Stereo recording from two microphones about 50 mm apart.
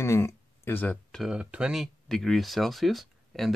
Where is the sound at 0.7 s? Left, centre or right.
Left.